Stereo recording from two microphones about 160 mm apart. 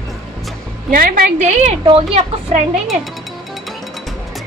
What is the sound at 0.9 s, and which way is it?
Speech, 60° right (ahead or behind).